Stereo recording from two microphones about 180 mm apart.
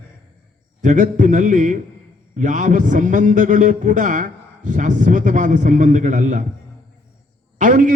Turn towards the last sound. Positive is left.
turn(degrees=-45)  # may be behind; listen again after turning